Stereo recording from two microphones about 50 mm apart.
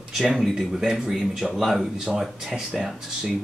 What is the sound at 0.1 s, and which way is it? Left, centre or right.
Speech, centre.